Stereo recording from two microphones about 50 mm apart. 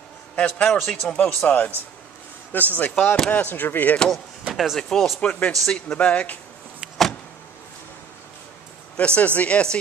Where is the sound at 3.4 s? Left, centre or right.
Left.